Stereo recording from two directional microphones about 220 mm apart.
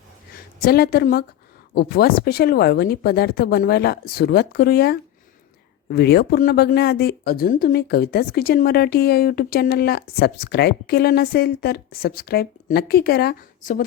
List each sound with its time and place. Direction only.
0.6 s speech: 45° left (ahead or behind)